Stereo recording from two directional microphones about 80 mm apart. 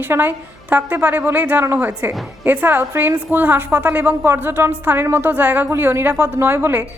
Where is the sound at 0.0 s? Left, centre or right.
Right.